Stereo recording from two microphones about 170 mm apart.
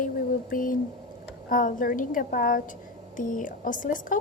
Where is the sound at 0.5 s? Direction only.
55° left (ahead or behind).